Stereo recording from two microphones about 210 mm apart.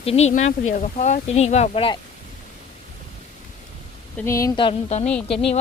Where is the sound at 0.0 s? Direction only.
30° left (ahead or behind).